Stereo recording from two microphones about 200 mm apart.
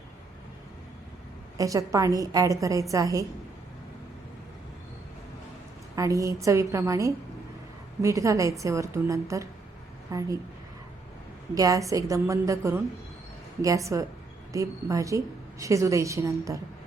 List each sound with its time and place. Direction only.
1.5 s a woman's voice: 15° right (ahead or behind)
6.0 s a woman's voice: 15° right (ahead or behind)
11.5 s a woman's voice: 15° right (ahead or behind)